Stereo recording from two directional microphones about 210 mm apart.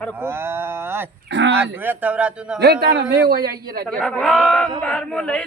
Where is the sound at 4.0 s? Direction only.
5° left (ahead or behind).